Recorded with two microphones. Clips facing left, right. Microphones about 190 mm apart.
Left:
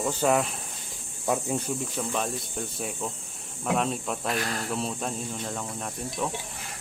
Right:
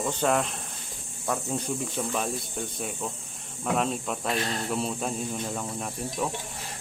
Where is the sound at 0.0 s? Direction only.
5° left (ahead or behind).